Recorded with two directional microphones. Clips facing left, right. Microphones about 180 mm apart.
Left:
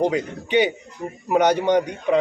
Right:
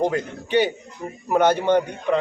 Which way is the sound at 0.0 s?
15° left (ahead or behind).